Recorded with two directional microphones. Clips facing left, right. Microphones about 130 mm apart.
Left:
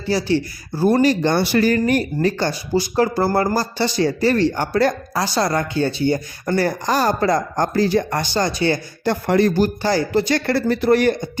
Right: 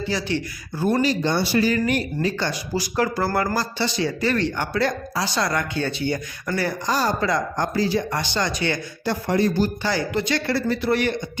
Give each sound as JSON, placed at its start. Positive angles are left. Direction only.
{"t": 0.1, "sound": "speech", "side_deg": 35}
{"t": 1.0, "sound": "speech", "side_deg": 55}
{"t": 1.8, "sound": "speech", "side_deg": 40}
{"t": 2.7, "sound": "speech", "side_deg": 30}
{"t": 9.0, "sound": "speech", "side_deg": 65}
{"t": 9.8, "sound": "speech", "side_deg": 40}